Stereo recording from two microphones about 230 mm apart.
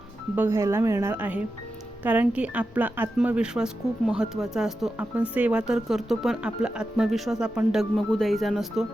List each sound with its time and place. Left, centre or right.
0.3 s speech: centre